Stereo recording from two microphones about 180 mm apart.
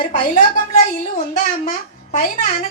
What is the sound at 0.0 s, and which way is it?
Speech, 50° left (ahead or behind).